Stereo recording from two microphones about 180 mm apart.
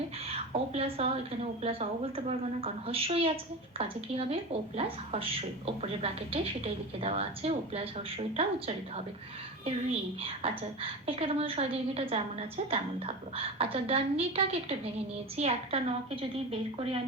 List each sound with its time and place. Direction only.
0.3 s a woman's voice: 35° right (ahead or behind)